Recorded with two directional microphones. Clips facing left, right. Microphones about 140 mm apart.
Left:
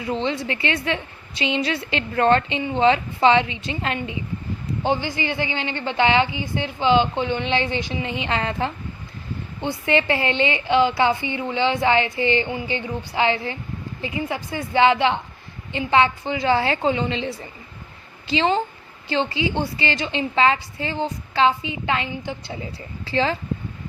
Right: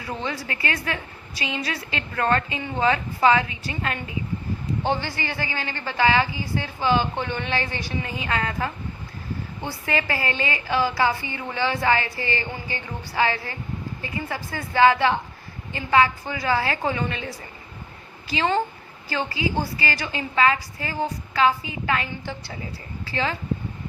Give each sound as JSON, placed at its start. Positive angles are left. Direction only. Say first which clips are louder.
{"t": 0.0, "sound": "a woman's voice", "louder": "left 6 dB", "side_deg": 25}